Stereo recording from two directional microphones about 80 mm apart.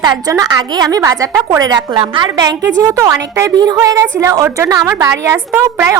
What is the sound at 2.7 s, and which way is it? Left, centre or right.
A woman's voice, right.